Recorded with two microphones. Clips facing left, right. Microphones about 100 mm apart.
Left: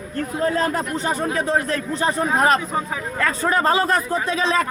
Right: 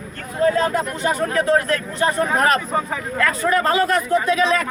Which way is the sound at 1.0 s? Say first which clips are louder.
Right 5 dB; 30° left (ahead or behind).